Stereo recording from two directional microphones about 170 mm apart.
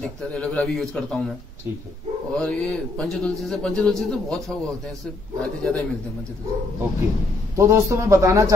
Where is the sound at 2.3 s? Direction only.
5° left (ahead or behind).